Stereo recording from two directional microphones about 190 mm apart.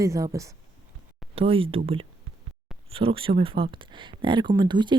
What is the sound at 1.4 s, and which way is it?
Speech, 30° right (ahead or behind).